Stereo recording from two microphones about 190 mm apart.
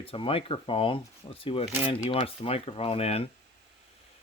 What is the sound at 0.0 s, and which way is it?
Speech, 30° left (ahead or behind).